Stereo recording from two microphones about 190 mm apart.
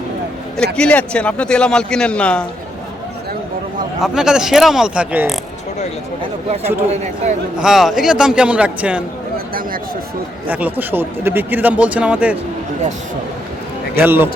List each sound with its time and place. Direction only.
0.5 s a man's voice: 5° left (ahead or behind)
4.0 s a man's voice: 5° right (ahead or behind)
6.9 s speech: 40° right (ahead or behind)
7.6 s a man's voice: centre (ahead or behind)
10.5 s speech: 10° right (ahead or behind)
13.9 s speech: 10° right (ahead or behind)